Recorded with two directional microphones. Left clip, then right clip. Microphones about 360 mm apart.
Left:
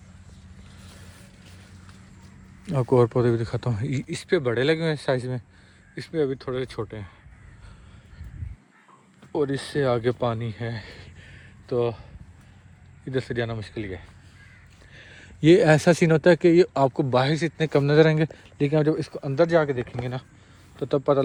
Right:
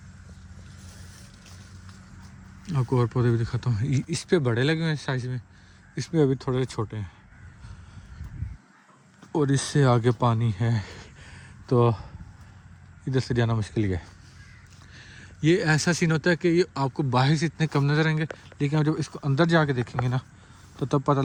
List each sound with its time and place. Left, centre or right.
2.6 s speech: centre
9.3 s speech: centre
15.4 s speech: centre